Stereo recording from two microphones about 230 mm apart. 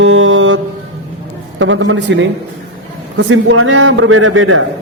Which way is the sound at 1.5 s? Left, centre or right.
Right.